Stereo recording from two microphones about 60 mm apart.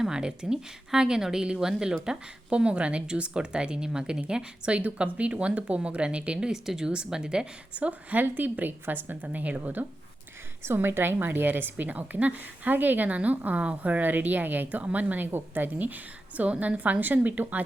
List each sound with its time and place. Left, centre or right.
0.0 s speech: centre
10.6 s a woman's voice: right